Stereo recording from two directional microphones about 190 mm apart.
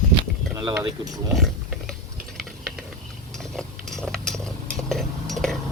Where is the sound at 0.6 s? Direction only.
20° right (ahead or behind).